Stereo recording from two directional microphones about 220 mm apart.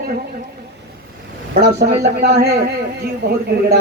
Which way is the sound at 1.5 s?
45° right (ahead or behind).